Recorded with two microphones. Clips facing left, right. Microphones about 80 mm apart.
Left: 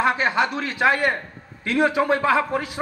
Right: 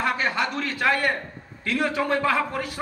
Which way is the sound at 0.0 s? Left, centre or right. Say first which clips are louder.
Left 4 dB; centre.